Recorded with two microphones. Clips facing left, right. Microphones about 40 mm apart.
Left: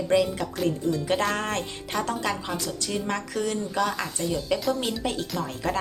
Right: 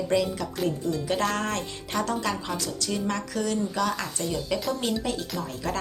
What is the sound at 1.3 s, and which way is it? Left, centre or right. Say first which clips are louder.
Music: even; left.